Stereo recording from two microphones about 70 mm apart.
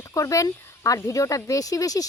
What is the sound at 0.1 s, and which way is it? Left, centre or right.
Speech, left.